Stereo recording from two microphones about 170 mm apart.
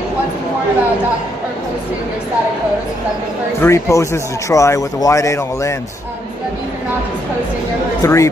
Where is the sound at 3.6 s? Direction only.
15° left (ahead or behind).